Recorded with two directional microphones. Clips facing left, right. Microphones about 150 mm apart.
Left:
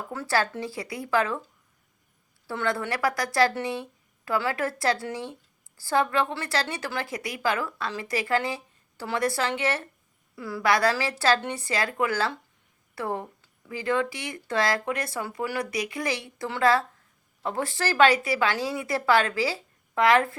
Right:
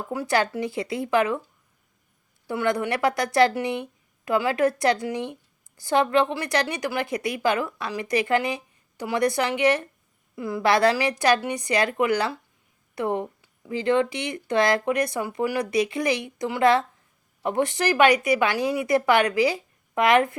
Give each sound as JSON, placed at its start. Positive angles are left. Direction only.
{"t": 0.1, "sound": "a woman's voice", "side_deg": -15}
{"t": 2.5, "sound": "a woman's voice", "side_deg": -15}